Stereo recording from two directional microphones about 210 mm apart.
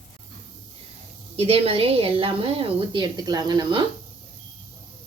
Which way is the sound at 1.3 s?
30° right (ahead or behind).